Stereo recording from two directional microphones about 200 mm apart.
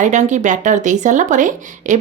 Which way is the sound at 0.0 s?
35° right (ahead or behind).